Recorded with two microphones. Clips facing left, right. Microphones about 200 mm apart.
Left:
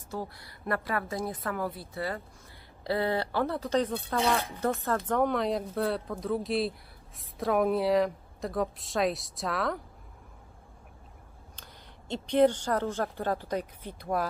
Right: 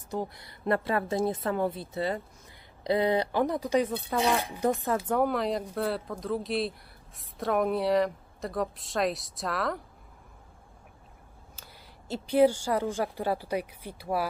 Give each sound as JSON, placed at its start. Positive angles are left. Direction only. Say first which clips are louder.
{"t": 0.1, "sound": "a woman's voice", "louder": "right 3 dB", "side_deg": -20}
{"t": 11.5, "sound": "a woman's voice", "louder": "even", "side_deg": -5}